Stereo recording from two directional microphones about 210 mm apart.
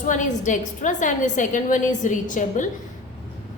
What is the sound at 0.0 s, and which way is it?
A woman's voice, 35° left (ahead or behind).